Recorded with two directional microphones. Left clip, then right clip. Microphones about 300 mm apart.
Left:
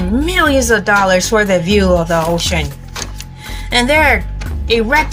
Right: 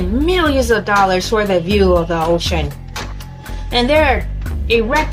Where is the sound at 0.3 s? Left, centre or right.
Left.